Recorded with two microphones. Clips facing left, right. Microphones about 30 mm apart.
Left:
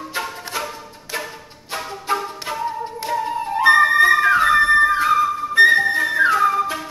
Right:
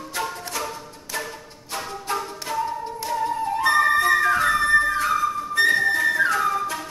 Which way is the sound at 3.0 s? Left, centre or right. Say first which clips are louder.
Left 2 dB; left.